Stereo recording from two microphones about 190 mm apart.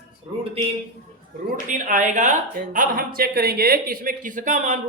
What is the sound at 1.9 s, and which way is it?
Speech, 40° right (ahead or behind).